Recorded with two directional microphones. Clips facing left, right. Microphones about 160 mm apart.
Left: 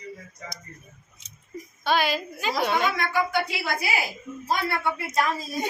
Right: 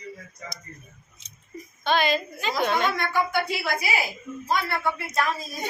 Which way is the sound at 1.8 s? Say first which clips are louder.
Right 1 dB; 10° left (ahead or behind).